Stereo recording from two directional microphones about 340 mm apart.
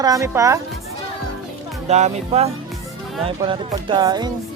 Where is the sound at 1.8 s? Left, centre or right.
Centre.